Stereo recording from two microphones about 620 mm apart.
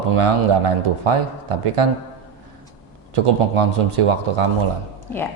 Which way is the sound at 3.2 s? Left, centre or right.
Right.